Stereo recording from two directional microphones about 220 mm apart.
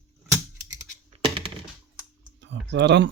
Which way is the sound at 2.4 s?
55° right (ahead or behind).